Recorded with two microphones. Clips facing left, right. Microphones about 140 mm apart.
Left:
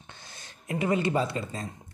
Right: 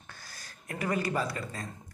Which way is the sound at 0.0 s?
25° left (ahead or behind).